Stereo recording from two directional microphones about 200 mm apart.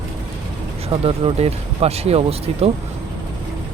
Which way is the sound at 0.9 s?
30° right (ahead or behind).